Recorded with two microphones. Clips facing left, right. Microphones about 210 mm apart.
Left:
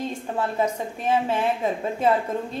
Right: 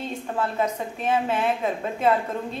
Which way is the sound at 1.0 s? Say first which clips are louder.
Left 1 dB; 15° left (ahead or behind).